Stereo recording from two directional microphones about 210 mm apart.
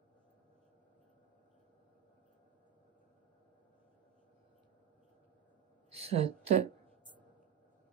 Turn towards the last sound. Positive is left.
turn(degrees=-30)  # may be behind; listen again after turning